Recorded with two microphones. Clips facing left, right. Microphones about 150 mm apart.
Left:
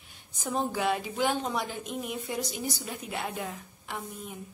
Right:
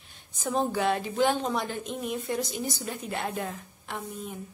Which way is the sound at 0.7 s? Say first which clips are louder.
Right 2 dB; 5° left (ahead or behind).